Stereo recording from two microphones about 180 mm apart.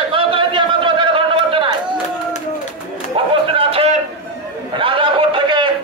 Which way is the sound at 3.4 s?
30° right (ahead or behind).